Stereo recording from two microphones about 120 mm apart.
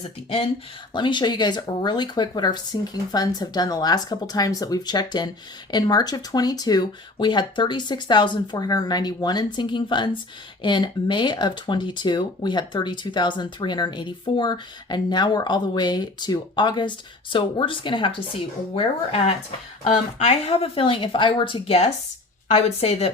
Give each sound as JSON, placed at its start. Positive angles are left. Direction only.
{"t": 0.0, "sound": "speech", "side_deg": 50}
{"t": 0.9, "sound": "speech", "side_deg": 40}
{"t": 19.8, "sound": "a woman's voice", "side_deg": 70}